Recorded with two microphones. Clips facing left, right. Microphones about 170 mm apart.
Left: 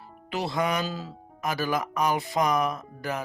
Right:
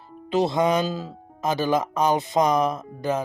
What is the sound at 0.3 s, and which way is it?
Speech, 20° right (ahead or behind).